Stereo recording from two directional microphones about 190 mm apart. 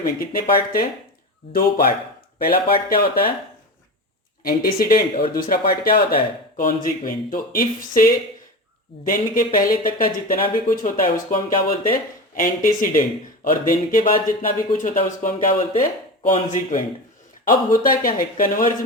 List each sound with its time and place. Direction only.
0.0 s speech: 50° left (ahead or behind)
4.4 s speech: 50° left (ahead or behind)
17.5 s speech: 45° left (ahead or behind)